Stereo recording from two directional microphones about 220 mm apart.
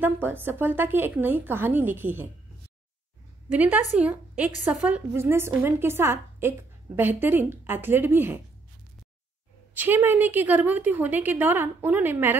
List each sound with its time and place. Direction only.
0.0 s a woman's voice: 10° right (ahead or behind)
3.5 s a woman's voice: 5° right (ahead or behind)
9.8 s a woman's voice: 10° right (ahead or behind)